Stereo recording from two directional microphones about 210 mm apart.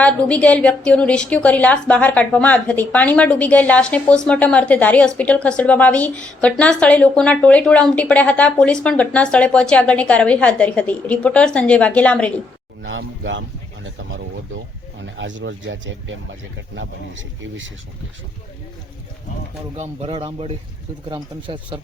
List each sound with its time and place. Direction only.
0.0 s a woman's voice: 5° left (ahead or behind)
12.8 s speech: 65° right (ahead or behind)
15.0 s speech: 60° right (ahead or behind)
19.7 s a man's voice: 30° right (ahead or behind)